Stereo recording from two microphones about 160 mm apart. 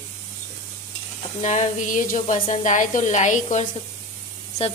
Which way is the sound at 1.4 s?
50° left (ahead or behind).